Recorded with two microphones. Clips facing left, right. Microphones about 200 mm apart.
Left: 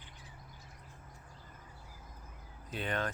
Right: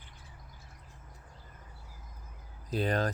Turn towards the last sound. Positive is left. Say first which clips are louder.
# right 6 dB
turn(degrees=-35)  # may be behind; listen again after turning